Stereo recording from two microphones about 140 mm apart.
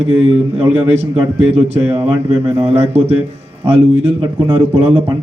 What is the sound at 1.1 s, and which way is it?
Speech, 35° right (ahead or behind).